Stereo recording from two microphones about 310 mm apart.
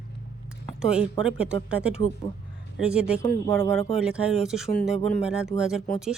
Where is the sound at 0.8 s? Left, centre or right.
Centre.